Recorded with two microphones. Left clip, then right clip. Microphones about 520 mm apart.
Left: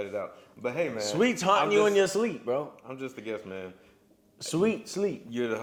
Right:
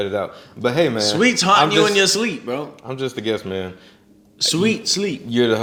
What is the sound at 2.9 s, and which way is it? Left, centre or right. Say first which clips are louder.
Speech: right 13 dB; right.